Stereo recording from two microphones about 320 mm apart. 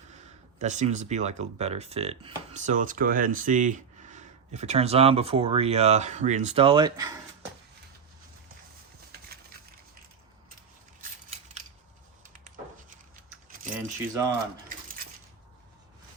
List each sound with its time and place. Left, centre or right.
0.6 s speech: right
11.0 s scissors: right
13.7 s speech: centre